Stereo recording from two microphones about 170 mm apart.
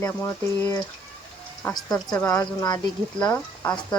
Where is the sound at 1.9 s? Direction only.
5° left (ahead or behind).